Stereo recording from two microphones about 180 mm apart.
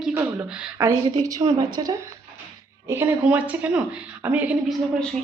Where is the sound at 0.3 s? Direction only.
5° right (ahead or behind).